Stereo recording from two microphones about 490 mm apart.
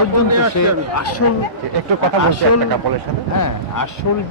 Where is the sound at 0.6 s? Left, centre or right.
Left.